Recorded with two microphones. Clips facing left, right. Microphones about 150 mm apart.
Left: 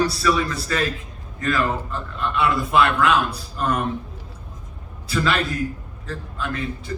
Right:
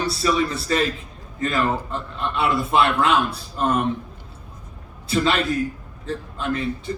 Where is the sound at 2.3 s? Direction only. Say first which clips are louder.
Left 1 dB; 25° right (ahead or behind).